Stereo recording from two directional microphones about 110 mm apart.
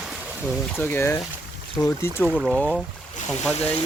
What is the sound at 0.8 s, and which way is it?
Speech, 20° left (ahead or behind).